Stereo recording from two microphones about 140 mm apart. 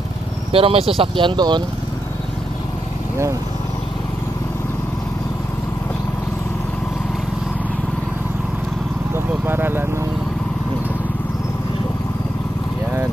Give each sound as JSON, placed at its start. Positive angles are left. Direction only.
{"t": 0.5, "sound": "speech", "side_deg": -40}
{"t": 9.1, "sound": "vehicle", "side_deg": -15}